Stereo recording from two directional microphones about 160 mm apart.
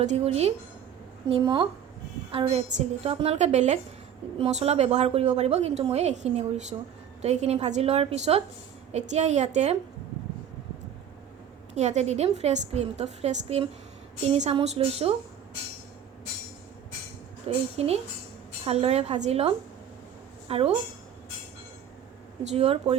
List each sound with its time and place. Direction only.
0.0 s a woman's voice: 45° right (ahead or behind)
1.3 s a woman's voice: 30° right (ahead or behind); by 9.7 s 45° right (ahead or behind)
11.7 s a woman's voice: 45° right (ahead or behind)
17.7 s a woman's voice: 40° right (ahead or behind)
22.4 s a woman's voice: 40° right (ahead or behind)